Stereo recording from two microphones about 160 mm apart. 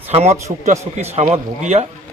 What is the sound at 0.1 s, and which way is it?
A man's voice, 40° right (ahead or behind).